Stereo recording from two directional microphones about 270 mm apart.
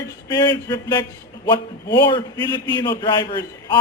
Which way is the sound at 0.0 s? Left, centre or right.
Centre.